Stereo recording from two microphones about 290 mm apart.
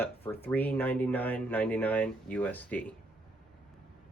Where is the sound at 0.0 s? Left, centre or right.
Centre.